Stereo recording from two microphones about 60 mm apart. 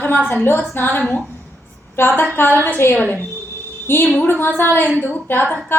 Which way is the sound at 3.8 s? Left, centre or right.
Left.